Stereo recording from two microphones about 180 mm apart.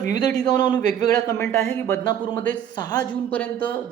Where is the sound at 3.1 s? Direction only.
10° left (ahead or behind).